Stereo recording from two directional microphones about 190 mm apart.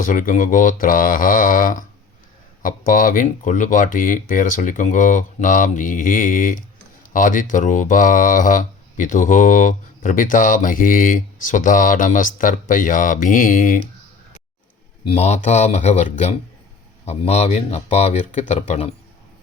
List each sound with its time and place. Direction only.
0.0 s speech: 45° left (ahead or behind)
15.0 s speech: 35° left (ahead or behind)